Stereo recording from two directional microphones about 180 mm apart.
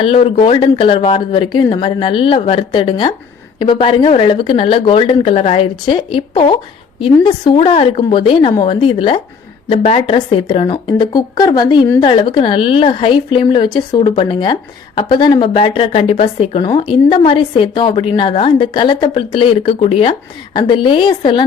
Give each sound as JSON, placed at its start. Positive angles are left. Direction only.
{"t": 0.0, "sound": "speech", "side_deg": 30}